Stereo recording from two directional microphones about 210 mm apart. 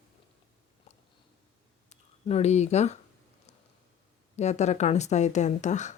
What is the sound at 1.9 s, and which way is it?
Speech, 30° left (ahead or behind).